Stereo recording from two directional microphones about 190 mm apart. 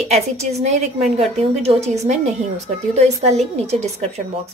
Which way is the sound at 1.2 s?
35° right (ahead or behind).